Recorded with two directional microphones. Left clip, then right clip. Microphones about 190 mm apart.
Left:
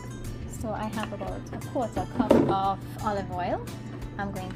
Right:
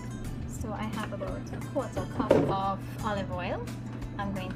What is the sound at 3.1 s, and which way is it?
Speech, 20° left (ahead or behind).